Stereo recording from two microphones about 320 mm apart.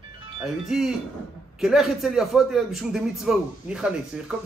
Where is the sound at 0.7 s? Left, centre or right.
Centre.